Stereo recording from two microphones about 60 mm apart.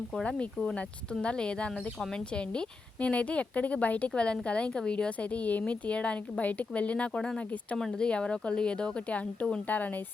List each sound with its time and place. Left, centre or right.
0.6 s a woman's voice: centre